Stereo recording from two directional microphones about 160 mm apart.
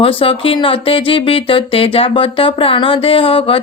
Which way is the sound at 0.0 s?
35° left (ahead or behind).